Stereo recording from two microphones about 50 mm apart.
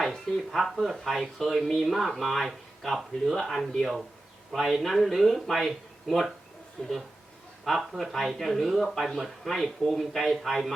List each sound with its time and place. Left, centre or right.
0.0 s speech: centre
6.8 s speech: centre
7.6 s speech: centre